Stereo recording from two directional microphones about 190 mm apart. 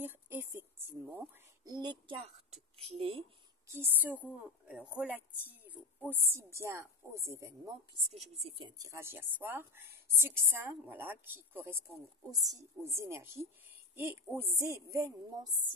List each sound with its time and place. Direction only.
0.0 s a sound: 10° right (ahead or behind); by 2.3 s 30° right (ahead or behind)
2.8 s speech: 30° right (ahead or behind)
3.6 s a woman's voice: 10° right (ahead or behind)
5.5 s a sound: 10° right (ahead or behind)
6.2 s a woman's voice: 15° right (ahead or behind)
8.1 s a woman's voice: 35° right (ahead or behind)